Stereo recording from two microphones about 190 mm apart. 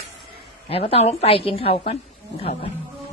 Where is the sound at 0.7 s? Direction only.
30° left (ahead or behind).